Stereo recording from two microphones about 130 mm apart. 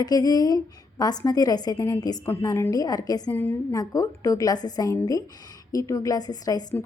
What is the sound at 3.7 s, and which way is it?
A woman's voice, 25° left (ahead or behind).